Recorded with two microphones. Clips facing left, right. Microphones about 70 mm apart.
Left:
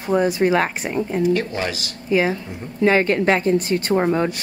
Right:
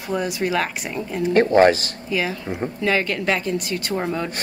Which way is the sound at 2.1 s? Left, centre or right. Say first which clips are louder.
Left 5 dB; left.